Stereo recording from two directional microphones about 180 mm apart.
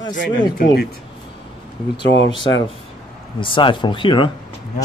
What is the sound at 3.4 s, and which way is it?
Speech, 30° left (ahead or behind).